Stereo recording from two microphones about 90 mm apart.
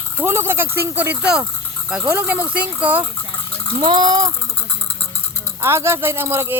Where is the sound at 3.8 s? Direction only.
60° right (ahead or behind).